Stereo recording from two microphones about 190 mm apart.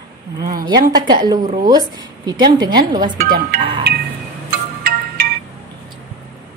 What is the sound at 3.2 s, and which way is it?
Speech, 55° right (ahead or behind).